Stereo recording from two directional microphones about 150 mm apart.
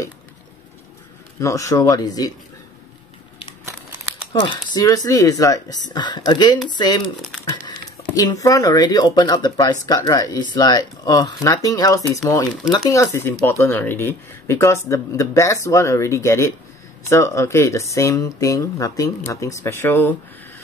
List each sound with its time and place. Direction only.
1.4 s speech: 20° left (ahead or behind)
4.3 s speech: 30° left (ahead or behind)
8.2 s speech: 25° left (ahead or behind)